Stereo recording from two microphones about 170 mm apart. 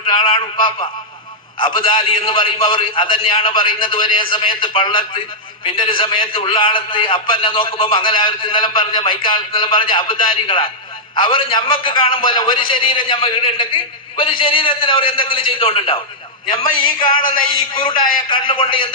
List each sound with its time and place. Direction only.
0.1 s a man's voice: 30° left (ahead or behind)
17.1 s a man's voice: 30° left (ahead or behind)